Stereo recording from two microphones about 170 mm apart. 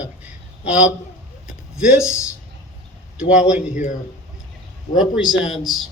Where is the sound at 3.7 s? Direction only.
45° left (ahead or behind).